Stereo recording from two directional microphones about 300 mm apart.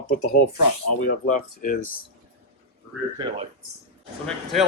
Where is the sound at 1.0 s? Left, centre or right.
Left.